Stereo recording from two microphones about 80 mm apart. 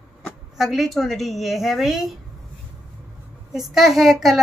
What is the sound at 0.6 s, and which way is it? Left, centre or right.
A woman's voice, centre.